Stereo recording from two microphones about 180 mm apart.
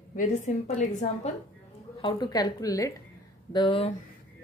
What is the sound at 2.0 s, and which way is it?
Speech, 25° left (ahead or behind).